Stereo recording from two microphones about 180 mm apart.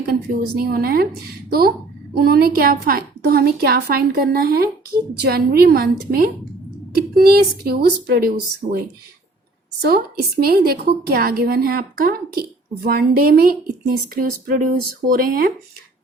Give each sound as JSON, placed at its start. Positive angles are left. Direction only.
{"t": 0.0, "sound": "a woman's voice", "side_deg": -55}
{"t": 9.8, "sound": "a woman's voice", "side_deg": -60}